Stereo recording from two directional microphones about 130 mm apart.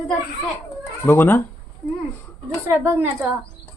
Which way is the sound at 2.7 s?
20° right (ahead or behind).